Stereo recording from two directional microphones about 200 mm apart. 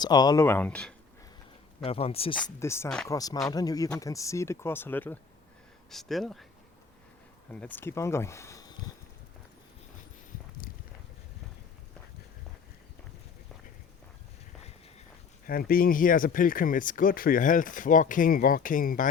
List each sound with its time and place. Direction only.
0.0 s speech: 20° left (ahead or behind)
1.8 s speech: 30° left (ahead or behind)
2.3 s speech: 15° left (ahead or behind)
7.5 s speech: 5° left (ahead or behind)
15.4 s speech: 45° left (ahead or behind)